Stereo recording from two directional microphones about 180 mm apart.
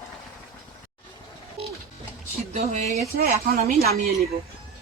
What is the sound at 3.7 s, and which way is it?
Speech, 60° right (ahead or behind).